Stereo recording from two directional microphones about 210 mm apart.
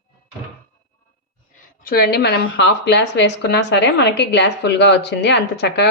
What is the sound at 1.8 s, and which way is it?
Speech, 45° left (ahead or behind).